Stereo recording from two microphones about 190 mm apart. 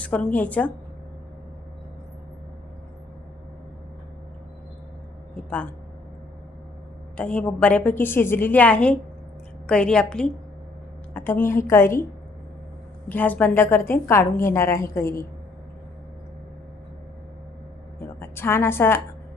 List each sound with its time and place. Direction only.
0.0 s a woman's voice: 5° left (ahead or behind)
7.2 s a woman's voice: 5° left (ahead or behind)
13.1 s a woman's voice: 10° left (ahead or behind)
18.2 s a woman's voice: 10° left (ahead or behind)